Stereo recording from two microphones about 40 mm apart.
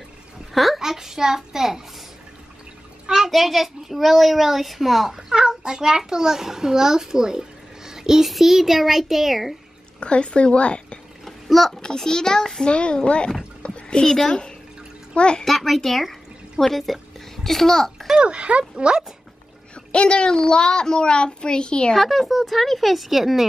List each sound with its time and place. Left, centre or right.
0.7 s a child's voice: centre
3.3 s a child's voice: centre
5.6 s a child's voice: centre
9.9 s a child's voice: left
11.2 s splash: centre
11.8 s a child's voice: centre
12.6 s a child's voice: left
13.6 s a sound: left
15.1 s a child's voice: left
15.4 s speech: centre
17.9 s a child's voice: centre
18.2 s speech: right
19.7 s a child's voice: left
21.9 s a child's voice: centre